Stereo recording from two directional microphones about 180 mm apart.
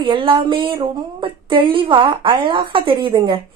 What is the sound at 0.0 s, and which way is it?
Speech, 30° right (ahead or behind).